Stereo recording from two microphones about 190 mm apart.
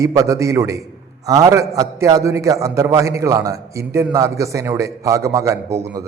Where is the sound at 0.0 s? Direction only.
15° right (ahead or behind).